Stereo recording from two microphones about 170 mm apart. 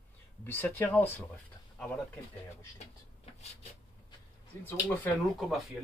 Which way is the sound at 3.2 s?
40° left (ahead or behind).